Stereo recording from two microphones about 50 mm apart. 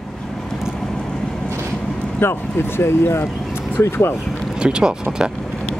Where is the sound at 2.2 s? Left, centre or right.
Left.